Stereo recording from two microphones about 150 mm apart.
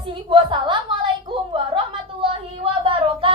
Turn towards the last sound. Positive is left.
turn(degrees=-35)  # may be behind; listen again after turning